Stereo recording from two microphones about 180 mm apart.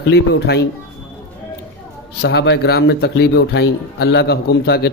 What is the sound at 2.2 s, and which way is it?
A man's voice, 70° left (ahead or behind).